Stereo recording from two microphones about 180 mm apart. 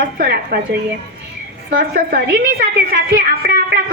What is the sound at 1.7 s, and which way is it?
A woman's voice, 50° right (ahead or behind).